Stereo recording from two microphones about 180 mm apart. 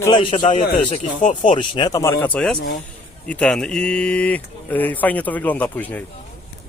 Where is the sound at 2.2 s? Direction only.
5° left (ahead or behind).